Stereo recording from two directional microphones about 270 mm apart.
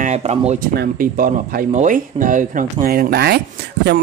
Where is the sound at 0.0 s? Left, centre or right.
Right.